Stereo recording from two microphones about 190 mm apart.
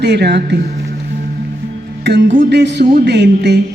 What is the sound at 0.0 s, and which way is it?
Speech, 60° right (ahead or behind).